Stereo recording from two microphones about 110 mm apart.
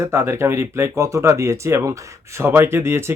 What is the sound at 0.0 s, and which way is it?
Speech, 25° right (ahead or behind).